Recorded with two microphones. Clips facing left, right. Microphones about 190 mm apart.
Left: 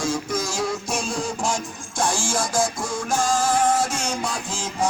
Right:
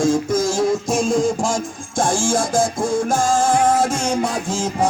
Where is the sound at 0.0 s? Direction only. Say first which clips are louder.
Right 8 dB; 45° right (ahead or behind).